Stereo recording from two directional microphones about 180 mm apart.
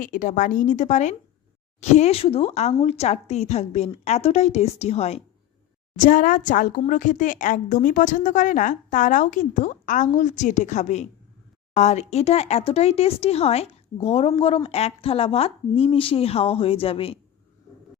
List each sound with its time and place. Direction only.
0.0 s speech: 50° left (ahead or behind)
6.0 s speech: 50° left (ahead or behind); by 17.2 s 30° left (ahead or behind)